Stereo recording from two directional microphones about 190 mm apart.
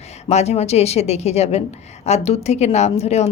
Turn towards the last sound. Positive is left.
turn(degrees=35)  # may be behind; listen again after turning